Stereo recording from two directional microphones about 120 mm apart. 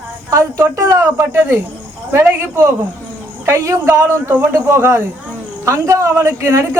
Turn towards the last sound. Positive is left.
turn(degrees=-25)  # may be behind; listen again after turning